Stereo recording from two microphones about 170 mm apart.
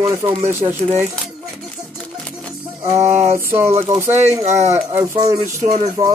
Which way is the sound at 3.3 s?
15° right (ahead or behind).